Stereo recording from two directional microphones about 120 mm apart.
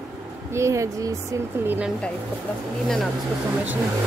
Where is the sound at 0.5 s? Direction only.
25° right (ahead or behind).